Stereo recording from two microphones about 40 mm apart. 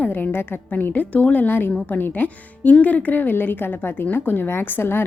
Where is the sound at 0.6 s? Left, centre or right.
Left.